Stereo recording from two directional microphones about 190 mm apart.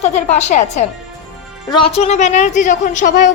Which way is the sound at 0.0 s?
35° left (ahead or behind).